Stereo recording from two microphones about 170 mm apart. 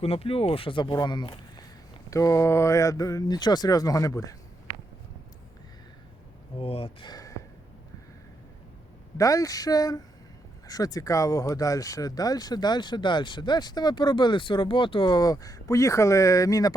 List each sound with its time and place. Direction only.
0.0 s speech: 35° left (ahead or behind); by 4.4 s 20° left (ahead or behind)
6.6 s speech: 35° left (ahead or behind)
9.1 s speech: 20° left (ahead or behind)